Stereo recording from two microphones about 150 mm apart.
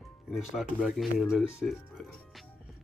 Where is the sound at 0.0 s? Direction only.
Centre (ahead or behind).